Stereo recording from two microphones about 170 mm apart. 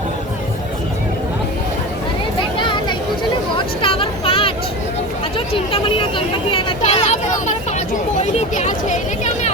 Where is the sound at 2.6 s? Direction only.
30° left (ahead or behind).